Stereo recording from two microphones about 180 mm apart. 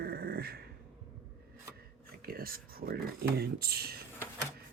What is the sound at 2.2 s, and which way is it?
Speech, 55° right (ahead or behind).